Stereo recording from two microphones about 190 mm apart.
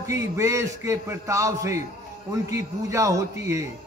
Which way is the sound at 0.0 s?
15° right (ahead or behind).